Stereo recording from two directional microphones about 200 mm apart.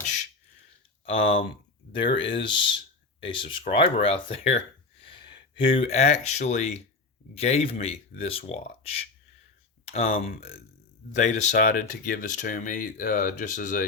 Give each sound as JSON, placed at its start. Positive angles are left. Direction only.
{"t": 1.0, "sound": "speech", "side_deg": 30}
{"t": 3.7, "sound": "speech", "side_deg": 25}